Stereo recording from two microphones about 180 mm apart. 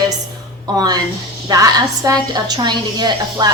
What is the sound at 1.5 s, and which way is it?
A woman's voice, 20° right (ahead or behind).